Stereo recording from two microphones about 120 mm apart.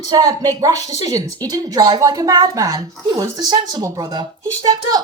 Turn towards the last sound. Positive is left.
turn(degrees=-35)  # may be behind; listen again after turning